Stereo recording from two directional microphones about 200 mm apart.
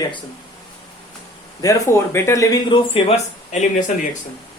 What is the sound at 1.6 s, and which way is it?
Speech, 15° left (ahead or behind).